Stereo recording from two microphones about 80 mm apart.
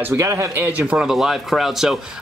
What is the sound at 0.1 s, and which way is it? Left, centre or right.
Speech, right.